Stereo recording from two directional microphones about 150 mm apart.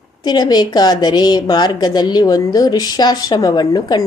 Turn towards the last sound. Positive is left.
turn(degrees=25)  # may be behind; listen again after turning